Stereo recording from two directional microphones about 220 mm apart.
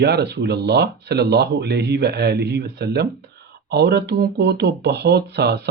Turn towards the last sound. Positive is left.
turn(degrees=-50)  # may be behind; listen again after turning